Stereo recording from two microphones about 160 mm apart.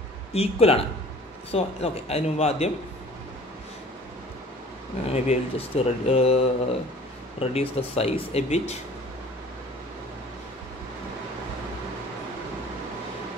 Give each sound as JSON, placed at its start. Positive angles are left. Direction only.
{"t": 0.3, "sound": "speech", "side_deg": 40}
{"t": 5.1, "sound": "speech", "side_deg": 40}